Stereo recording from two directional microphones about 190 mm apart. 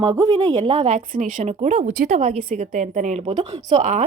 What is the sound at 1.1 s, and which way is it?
A woman's voice, 40° right (ahead or behind).